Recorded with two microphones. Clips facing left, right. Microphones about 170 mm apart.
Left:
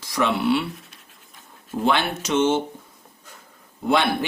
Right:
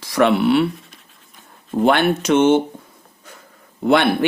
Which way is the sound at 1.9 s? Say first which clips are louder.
Right 6 dB; 60° right (ahead or behind).